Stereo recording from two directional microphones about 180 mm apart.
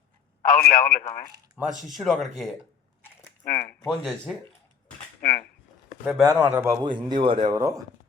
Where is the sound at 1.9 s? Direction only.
Centre (ahead or behind).